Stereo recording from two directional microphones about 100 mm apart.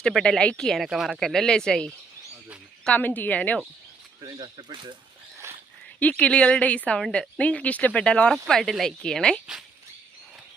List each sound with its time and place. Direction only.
0.0 s speech: 5° left (ahead or behind)
4.2 s speech: 45° right (ahead or behind)
5.4 s a sound: 25° right (ahead or behind)
6.0 s speech: 15° left (ahead or behind)